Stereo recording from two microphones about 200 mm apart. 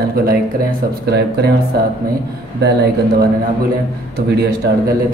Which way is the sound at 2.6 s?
55° right (ahead or behind).